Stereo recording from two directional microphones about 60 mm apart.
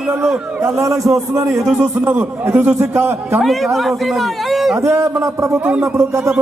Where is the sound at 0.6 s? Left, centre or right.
Right.